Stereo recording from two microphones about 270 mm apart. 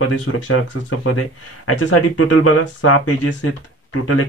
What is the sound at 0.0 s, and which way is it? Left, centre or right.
Speech, left.